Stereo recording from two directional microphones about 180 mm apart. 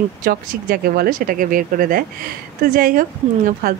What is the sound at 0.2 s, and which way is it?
Speech, 55° right (ahead or behind).